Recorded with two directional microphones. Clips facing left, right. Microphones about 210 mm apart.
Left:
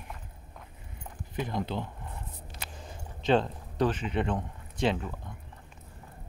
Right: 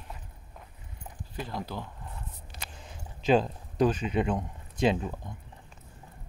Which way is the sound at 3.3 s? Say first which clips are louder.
Right 1 dB; 10° right (ahead or behind).